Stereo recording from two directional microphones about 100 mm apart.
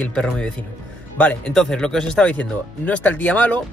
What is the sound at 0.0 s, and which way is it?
Speech, 10° left (ahead or behind).